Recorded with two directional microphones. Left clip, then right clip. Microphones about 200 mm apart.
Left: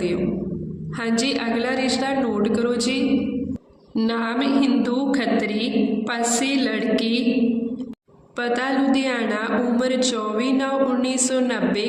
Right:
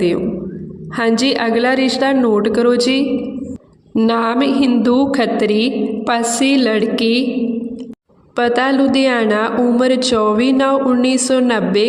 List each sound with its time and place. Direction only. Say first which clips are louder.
0.9 s speech: right 8 dB; 45° right (ahead or behind)
8.4 s speech: right 8 dB; 45° right (ahead or behind)